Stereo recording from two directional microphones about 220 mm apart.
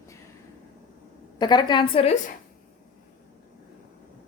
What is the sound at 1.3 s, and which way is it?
Speech, 20° left (ahead or behind).